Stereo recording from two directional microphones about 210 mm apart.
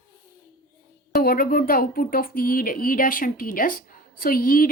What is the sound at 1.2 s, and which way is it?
A woman's voice, 45° left (ahead or behind).